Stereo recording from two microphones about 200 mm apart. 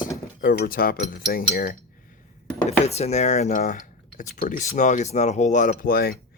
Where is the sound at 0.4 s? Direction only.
45° left (ahead or behind).